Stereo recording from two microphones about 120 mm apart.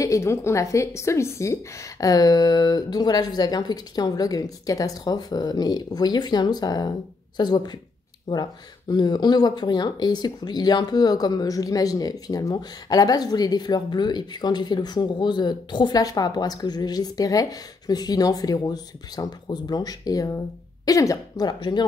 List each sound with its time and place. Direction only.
0.0 s speech: 25° left (ahead or behind)